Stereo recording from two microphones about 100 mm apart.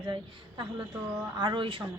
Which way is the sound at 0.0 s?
50° right (ahead or behind).